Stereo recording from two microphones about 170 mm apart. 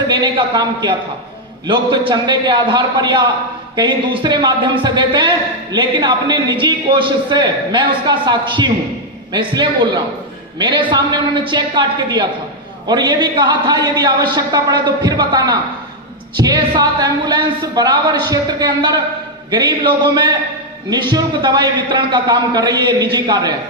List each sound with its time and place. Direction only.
0.1 s a man's voice: 25° right (ahead or behind)